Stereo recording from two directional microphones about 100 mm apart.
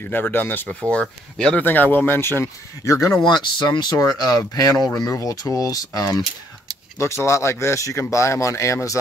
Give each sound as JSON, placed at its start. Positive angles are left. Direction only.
{"t": 0.0, "sound": "speech", "side_deg": 20}
{"t": 1.6, "sound": "speech", "side_deg": 20}
{"t": 3.5, "sound": "speech", "side_deg": 50}
{"t": 7.0, "sound": "speech", "side_deg": 30}